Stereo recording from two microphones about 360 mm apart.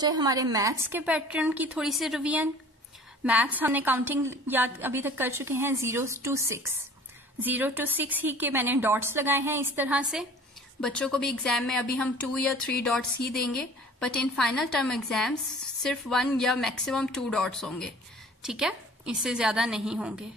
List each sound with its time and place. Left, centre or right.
0.0 s speech: centre